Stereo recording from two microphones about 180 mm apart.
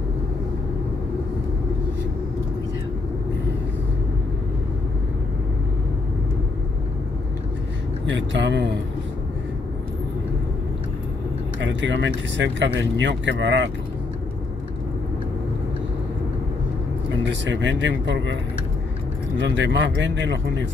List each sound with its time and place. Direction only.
8.3 s speech: 85° right
11.6 s speech: 90° right
17.2 s speech: 90° right